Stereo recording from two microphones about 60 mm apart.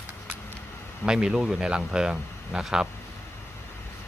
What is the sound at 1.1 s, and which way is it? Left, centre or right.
Speech, centre.